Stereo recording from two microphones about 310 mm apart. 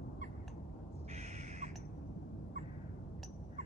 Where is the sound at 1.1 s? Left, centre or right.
Right.